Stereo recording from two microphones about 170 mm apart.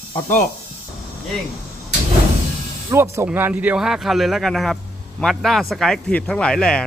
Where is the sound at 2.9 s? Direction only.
15° right (ahead or behind).